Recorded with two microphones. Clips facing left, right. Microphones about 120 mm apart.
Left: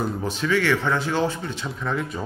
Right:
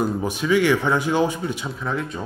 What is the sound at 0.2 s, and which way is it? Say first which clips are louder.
Speech: right 3 dB; 15° right (ahead or behind).